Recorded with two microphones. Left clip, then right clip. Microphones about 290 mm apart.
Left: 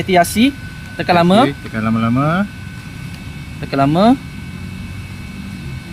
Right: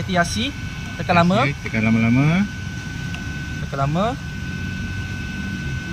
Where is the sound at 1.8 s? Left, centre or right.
Centre.